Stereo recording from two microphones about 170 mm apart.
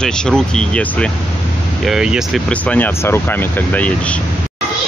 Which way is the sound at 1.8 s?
5° right (ahead or behind).